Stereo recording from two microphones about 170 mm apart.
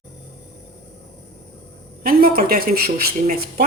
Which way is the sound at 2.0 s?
60° right (ahead or behind).